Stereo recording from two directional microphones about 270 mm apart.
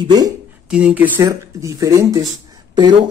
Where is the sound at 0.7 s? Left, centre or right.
Centre.